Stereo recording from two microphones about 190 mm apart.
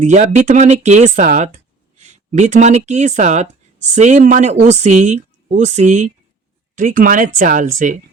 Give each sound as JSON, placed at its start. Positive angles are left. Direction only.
{"t": 0.0, "sound": "speech", "side_deg": -40}